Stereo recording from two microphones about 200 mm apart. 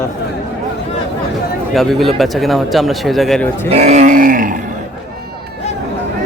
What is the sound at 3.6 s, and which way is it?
Speech, 35° right (ahead or behind).